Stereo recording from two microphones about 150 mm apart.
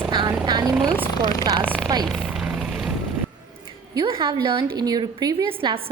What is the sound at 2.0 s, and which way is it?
Vehicle, centre (ahead or behind).